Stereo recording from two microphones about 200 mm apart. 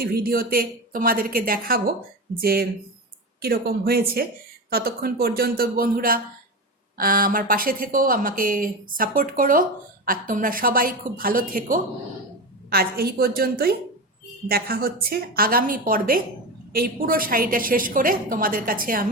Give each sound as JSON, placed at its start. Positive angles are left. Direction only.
{"t": 0.0, "sound": "a woman's voice", "side_deg": -50}